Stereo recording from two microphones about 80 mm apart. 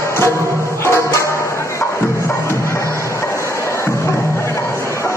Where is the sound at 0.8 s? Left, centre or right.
Left.